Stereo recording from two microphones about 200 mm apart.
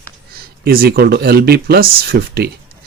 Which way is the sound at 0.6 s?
50° right (ahead or behind).